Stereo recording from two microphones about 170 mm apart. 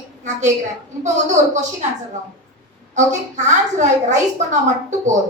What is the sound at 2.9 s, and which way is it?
A woman's voice, 45° right (ahead or behind).